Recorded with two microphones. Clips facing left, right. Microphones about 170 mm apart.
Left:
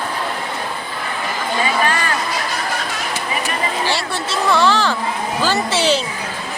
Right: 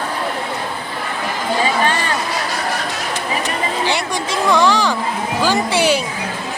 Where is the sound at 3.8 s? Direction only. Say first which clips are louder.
Right 2 dB; 15° right (ahead or behind).